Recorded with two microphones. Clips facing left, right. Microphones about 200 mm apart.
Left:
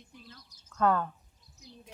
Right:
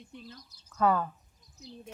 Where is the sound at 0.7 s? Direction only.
5° right (ahead or behind).